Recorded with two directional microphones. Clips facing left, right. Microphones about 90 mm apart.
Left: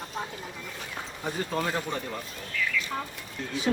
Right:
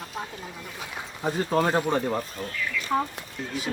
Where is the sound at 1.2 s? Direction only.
35° right (ahead or behind).